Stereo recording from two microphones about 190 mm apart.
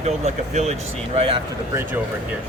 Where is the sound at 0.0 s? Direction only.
35° right (ahead or behind).